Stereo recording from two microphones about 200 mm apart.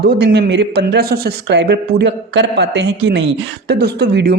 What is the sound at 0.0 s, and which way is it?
Speech, 55° right (ahead or behind).